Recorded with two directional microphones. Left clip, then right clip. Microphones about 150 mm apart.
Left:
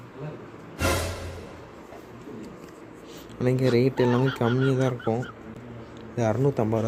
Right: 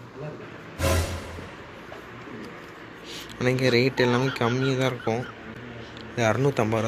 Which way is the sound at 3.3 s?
35° left (ahead or behind).